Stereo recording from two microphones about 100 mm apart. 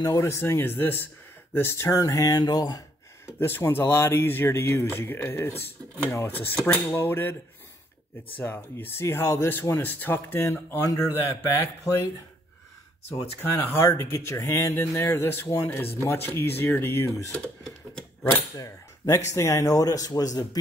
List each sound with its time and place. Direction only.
0.0 s speech: 30° left (ahead or behind)
3.3 s speech: 25° left (ahead or behind)
8.4 s speech: 20° left (ahead or behind)
13.4 s speech: 20° left (ahead or behind)
18.6 s speech: 30° left (ahead or behind)